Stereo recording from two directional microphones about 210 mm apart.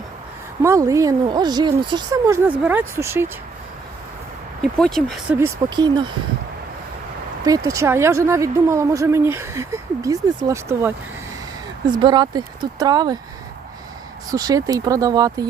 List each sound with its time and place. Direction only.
0.6 s speech: 15° right (ahead or behind)
4.6 s speech: centre (ahead or behind)
5.4 s speech: 20° right (ahead or behind)
7.4 s speech: 15° right (ahead or behind)
14.3 s speech: 15° right (ahead or behind)